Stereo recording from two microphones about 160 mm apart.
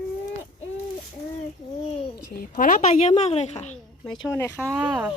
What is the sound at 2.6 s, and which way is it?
A woman's voice, 55° left (ahead or behind).